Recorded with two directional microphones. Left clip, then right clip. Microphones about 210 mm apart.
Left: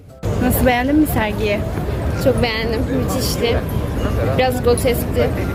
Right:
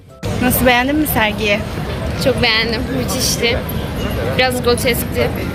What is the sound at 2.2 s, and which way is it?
A woman's voice, 25° left (ahead or behind).